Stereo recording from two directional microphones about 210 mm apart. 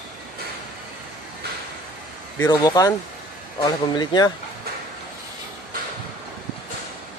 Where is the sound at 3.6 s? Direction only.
20° left (ahead or behind).